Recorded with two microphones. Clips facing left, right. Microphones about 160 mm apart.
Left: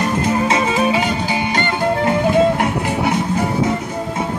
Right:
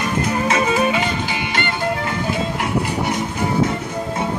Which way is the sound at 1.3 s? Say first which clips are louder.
Left 4 dB; 40° left (ahead or behind).